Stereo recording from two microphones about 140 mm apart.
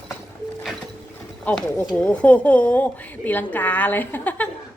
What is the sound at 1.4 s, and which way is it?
A woman's voice, 10° left (ahead or behind).